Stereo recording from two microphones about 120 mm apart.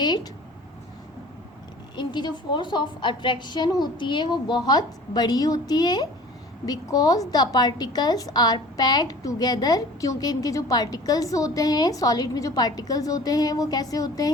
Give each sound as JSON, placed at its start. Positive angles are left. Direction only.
{"t": 2.0, "sound": "a woman's voice", "side_deg": 40}